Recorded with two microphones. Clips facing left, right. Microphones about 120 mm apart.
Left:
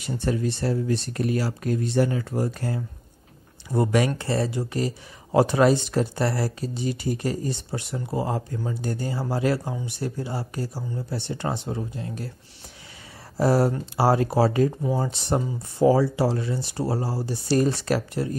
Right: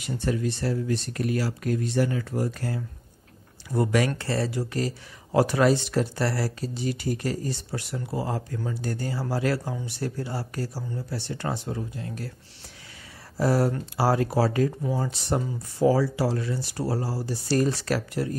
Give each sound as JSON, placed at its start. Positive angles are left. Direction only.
{"t": 0.1, "sound": "speech", "side_deg": 30}
{"t": 13.4, "sound": "speech", "side_deg": 30}